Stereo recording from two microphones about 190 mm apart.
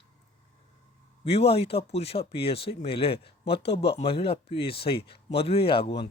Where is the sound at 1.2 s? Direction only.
30° left (ahead or behind).